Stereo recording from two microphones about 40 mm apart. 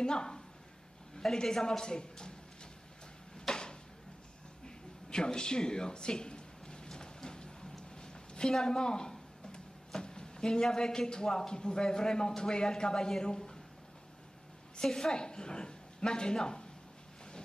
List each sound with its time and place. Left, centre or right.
0.0 s a woman's voice: centre
3.3 s a sound: centre
14.8 s a woman's voice: centre